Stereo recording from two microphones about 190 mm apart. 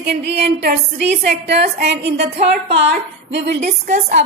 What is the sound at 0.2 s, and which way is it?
A woman's voice, 60° right (ahead or behind).